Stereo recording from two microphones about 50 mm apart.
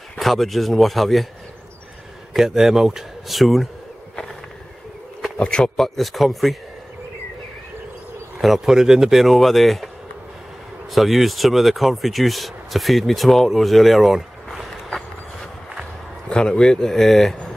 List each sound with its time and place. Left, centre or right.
0.2 s speech: centre
2.3 s speech: centre
5.4 s a man's voice: left
5.8 s speech: centre
8.4 s speech: centre
10.9 s speech: centre
16.3 s speech: centre